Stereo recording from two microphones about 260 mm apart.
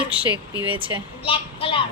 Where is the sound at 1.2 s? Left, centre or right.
Left.